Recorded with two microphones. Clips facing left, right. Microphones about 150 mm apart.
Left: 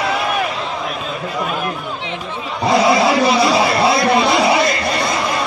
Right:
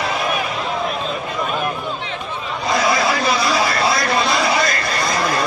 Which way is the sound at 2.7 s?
25° left (ahead or behind).